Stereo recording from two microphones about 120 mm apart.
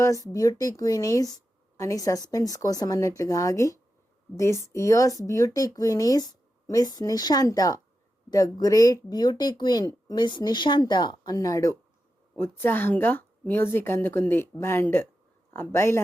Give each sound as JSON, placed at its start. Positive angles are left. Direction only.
{"t": 0.0, "sound": "speech", "side_deg": 25}